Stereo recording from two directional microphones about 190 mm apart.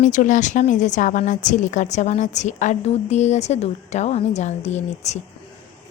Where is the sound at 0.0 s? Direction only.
40° left (ahead or behind).